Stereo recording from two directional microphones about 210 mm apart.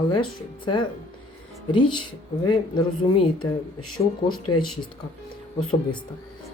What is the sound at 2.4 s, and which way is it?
Speech, 20° left (ahead or behind).